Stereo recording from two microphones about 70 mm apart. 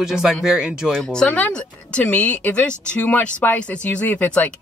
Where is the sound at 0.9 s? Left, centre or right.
Centre.